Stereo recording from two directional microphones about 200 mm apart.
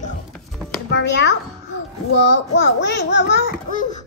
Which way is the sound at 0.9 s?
60° left (ahead or behind).